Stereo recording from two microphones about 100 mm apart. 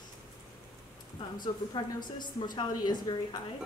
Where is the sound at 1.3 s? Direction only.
45° left (ahead or behind).